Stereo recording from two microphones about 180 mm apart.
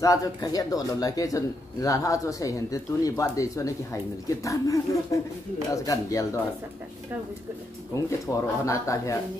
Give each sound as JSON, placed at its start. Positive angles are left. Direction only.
{"t": 0.0, "sound": "a man's voice", "side_deg": 20}
{"t": 7.9, "sound": "speech", "side_deg": 15}